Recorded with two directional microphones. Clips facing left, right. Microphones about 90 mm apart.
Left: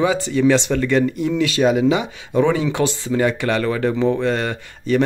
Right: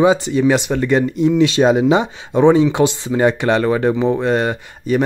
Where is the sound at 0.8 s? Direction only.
25° right (ahead or behind).